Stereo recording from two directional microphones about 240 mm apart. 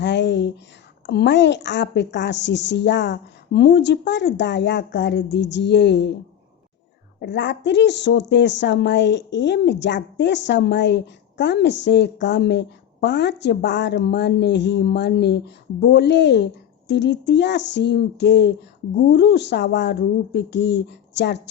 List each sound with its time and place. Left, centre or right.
0.0 s a sound: left
1.0 s speech: left
7.2 s speech: left